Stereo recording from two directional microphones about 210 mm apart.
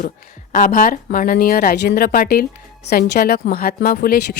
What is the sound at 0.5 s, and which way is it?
A woman's voice, 40° left (ahead or behind).